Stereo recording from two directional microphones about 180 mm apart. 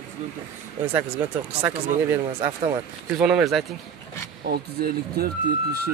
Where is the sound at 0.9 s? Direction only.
10° right (ahead or behind).